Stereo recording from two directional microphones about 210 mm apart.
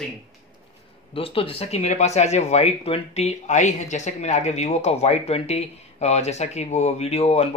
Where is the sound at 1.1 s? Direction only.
25° left (ahead or behind).